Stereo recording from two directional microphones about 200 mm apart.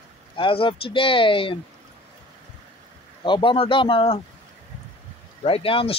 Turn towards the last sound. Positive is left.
turn(degrees=30)  # may be behind; listen again after turning